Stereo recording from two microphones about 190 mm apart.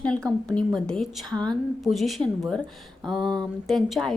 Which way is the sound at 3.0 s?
25° right (ahead or behind).